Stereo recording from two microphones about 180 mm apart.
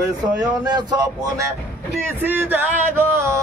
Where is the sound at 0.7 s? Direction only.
25° right (ahead or behind).